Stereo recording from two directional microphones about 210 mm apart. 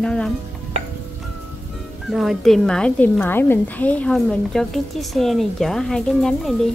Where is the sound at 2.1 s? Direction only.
Centre (ahead or behind).